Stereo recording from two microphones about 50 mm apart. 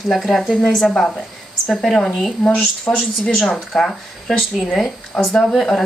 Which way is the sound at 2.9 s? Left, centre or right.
Left.